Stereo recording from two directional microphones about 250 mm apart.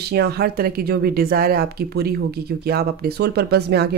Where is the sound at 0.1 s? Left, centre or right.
Right.